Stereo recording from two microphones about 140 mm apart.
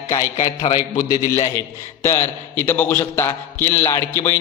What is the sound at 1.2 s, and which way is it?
A man's voice, 20° left (ahead or behind).